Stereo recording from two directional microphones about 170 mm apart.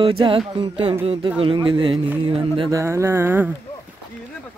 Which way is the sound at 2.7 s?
15° right (ahead or behind).